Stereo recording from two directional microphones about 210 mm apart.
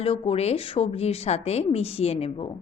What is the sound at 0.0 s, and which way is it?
A woman's voice, 25° left (ahead or behind).